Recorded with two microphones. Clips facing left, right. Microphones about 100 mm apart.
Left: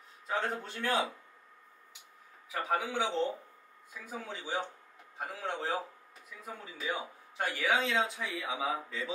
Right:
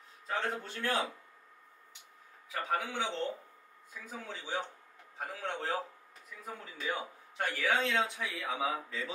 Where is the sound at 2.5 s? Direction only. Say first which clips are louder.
Left 2 dB; 10° left (ahead or behind).